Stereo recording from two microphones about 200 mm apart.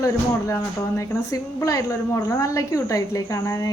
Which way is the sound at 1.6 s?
15° left (ahead or behind).